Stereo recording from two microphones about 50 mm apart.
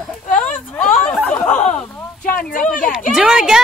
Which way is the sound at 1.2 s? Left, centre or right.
Left.